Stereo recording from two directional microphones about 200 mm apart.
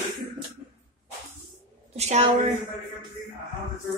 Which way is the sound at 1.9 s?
35° right (ahead or behind).